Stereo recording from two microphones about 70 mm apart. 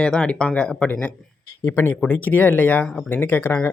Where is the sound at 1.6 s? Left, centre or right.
Left.